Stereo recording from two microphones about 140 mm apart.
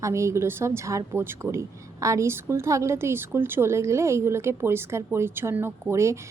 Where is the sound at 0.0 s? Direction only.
20° right (ahead or behind).